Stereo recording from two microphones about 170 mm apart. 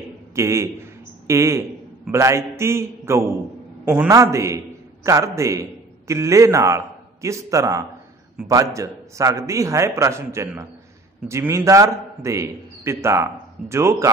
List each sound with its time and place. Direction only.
0.3 s a man's voice: 15° right (ahead or behind)